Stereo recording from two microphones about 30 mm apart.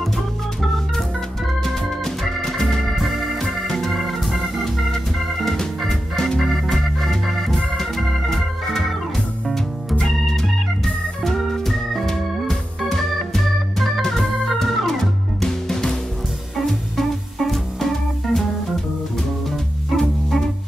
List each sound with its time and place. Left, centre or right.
1.6 s organ: centre
3.0 s organ: centre
3.3 s organ: centre
6.1 s music: centre
7.4 s organ: centre
11.2 s organ: centre
17.5 s music: centre
20.0 s music: centre